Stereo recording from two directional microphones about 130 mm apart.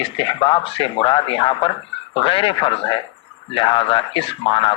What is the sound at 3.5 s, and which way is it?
Speech, 40° left (ahead or behind).